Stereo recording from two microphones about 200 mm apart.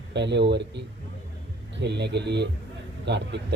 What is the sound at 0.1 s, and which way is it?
Speech, 60° right (ahead or behind).